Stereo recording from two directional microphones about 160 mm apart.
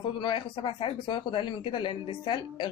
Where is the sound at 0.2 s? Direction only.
30° left (ahead or behind).